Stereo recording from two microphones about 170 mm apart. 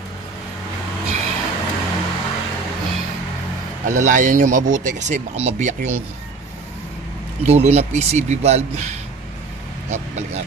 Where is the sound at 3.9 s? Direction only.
45° right (ahead or behind).